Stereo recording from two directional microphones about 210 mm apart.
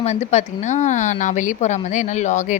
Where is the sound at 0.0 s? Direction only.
30° left (ahead or behind).